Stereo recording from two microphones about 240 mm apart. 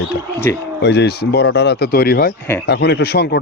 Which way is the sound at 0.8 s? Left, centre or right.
Left.